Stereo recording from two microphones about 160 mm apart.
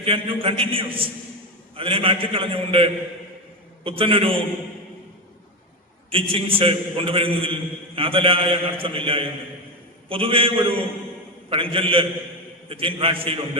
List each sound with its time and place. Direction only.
0.0 s a man's voice: 35° right (ahead or behind)
6.1 s a man's voice: 35° right (ahead or behind)